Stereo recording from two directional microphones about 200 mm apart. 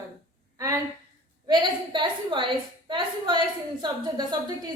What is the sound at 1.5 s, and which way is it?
A woman's voice, 25° right (ahead or behind).